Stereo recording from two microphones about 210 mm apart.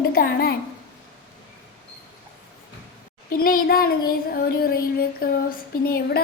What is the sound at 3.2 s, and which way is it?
Child singing, 45° left (ahead or behind).